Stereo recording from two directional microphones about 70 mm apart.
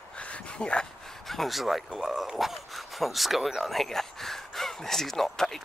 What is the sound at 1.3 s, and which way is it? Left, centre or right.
Speech, centre.